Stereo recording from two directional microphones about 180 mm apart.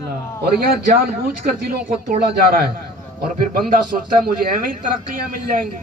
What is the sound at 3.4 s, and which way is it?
Speech, 50° right (ahead or behind).